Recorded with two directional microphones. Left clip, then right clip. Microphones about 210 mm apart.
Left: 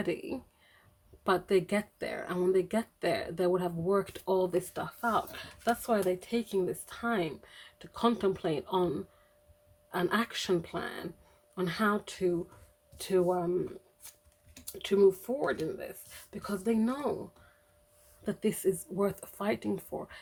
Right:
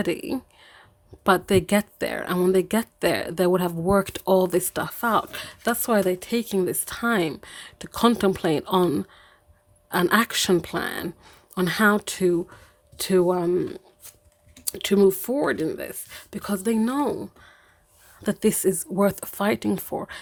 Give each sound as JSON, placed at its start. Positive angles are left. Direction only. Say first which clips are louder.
{"t": 0.0, "sound": "speech", "louder": "right 8 dB", "side_deg": -40}
{"t": 18.2, "sound": "speech", "louder": "right 10 dB", "side_deg": -50}